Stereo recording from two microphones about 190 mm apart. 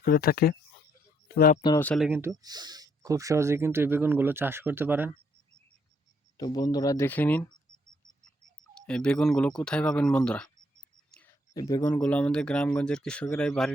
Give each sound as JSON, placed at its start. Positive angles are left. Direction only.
{"t": 0.0, "sound": "speech", "side_deg": 50}
{"t": 1.8, "sound": "speech", "side_deg": 5}
{"t": 2.0, "sound": "speech", "side_deg": -10}
{"t": 6.3, "sound": "speech", "side_deg": 20}
{"t": 8.7, "sound": "speech", "side_deg": 5}
{"t": 11.1, "sound": "a sound", "side_deg": 10}
{"t": 11.7, "sound": "speech", "side_deg": 10}